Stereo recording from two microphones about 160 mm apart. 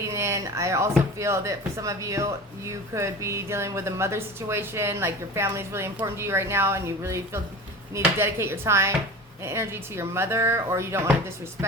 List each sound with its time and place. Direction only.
0.1 s speech: 20° right (ahead or behind)